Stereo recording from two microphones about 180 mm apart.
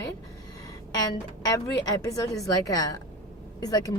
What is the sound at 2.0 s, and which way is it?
Speech, 20° left (ahead or behind).